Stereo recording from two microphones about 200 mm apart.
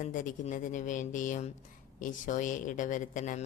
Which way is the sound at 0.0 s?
40° left (ahead or behind).